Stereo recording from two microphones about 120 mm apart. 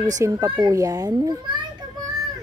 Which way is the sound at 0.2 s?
30° right (ahead or behind).